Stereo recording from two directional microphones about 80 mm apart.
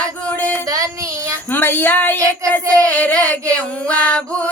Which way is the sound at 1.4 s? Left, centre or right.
Left.